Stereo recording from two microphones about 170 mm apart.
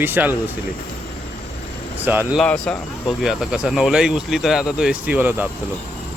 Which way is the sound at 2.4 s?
5° left (ahead or behind).